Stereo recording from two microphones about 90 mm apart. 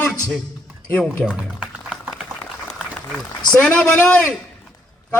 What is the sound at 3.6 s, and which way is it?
Speech, 15° left (ahead or behind).